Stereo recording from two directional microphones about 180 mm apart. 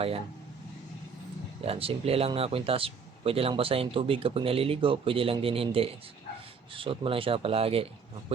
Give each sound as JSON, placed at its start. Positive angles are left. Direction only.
{"t": 1.6, "sound": "speech", "side_deg": -30}